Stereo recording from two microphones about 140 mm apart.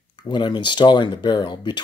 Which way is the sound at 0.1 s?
35° left (ahead or behind).